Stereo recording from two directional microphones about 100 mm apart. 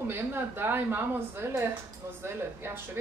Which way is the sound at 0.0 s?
20° right (ahead or behind).